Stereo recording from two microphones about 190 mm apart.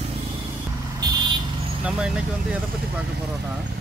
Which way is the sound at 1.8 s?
5° right (ahead or behind).